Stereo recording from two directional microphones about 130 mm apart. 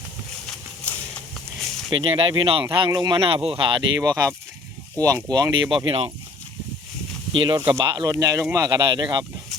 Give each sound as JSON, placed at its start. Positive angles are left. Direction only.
{"t": 0.4, "sound": "a sound", "side_deg": 10}
{"t": 1.9, "sound": "speech", "side_deg": -45}
{"t": 3.2, "sound": "speech", "side_deg": -45}
{"t": 7.3, "sound": "speech", "side_deg": -40}